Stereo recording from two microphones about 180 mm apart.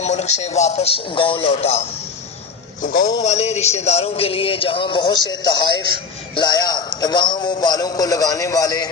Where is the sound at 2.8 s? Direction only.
50° left (ahead or behind).